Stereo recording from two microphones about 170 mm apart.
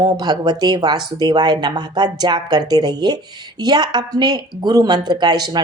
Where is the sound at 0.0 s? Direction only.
25° right (ahead or behind).